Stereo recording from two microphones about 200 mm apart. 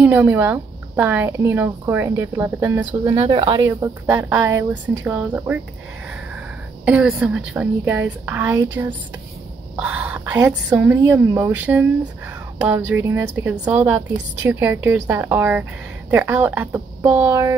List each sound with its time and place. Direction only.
0.0 s speech: 10° right (ahead or behind)
3.2 s speech: 25° right (ahead or behind); by 5.6 s 5° right (ahead or behind)
6.8 s speech: 5° right (ahead or behind)
9.8 s speech: 5° right (ahead or behind)